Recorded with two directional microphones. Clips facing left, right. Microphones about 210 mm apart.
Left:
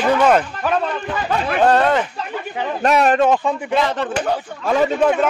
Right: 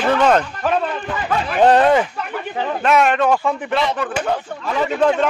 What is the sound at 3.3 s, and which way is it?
Speech, 20° left (ahead or behind).